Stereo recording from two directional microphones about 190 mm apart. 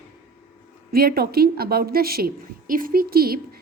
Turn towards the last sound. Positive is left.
turn(degrees=-55)  # may be behind; listen again after turning